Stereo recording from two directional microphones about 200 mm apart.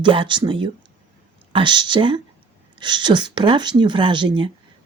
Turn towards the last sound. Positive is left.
turn(degrees=-25)  # may be behind; listen again after turning